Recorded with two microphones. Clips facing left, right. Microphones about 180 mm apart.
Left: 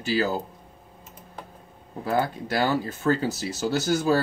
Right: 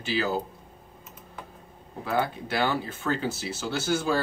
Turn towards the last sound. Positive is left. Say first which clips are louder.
# left 4 dB
turn(degrees=40)  # may be behind; listen again after turning